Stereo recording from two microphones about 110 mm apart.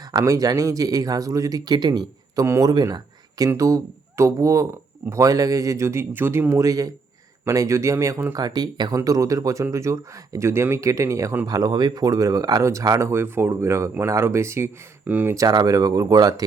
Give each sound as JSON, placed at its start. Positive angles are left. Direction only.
{"t": 0.1, "sound": "speech", "side_deg": -35}
{"t": 8.4, "sound": "speech", "side_deg": -35}
{"t": 15.4, "sound": "speech", "side_deg": -35}